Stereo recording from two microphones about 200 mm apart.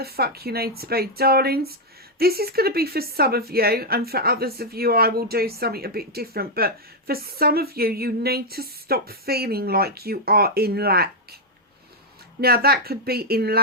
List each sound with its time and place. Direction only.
0.0 s a woman's voice: 50° right (ahead or behind)
12.4 s a woman's voice: 50° right (ahead or behind)